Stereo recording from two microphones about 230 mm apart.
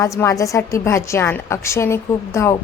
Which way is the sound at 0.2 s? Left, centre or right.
Centre.